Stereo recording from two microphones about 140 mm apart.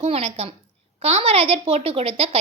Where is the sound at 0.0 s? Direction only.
45° right (ahead or behind).